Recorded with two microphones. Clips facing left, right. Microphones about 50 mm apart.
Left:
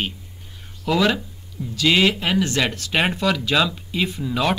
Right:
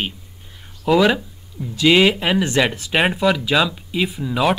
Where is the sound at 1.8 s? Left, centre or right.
Centre.